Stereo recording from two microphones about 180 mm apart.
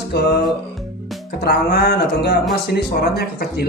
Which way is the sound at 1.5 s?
60° left (ahead or behind).